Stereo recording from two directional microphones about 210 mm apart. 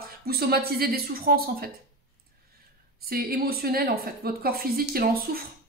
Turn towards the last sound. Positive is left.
turn(degrees=-45)  # may be behind; listen again after turning